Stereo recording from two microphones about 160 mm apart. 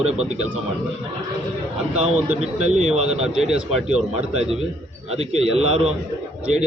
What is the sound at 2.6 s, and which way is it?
A man's voice, 45° right (ahead or behind).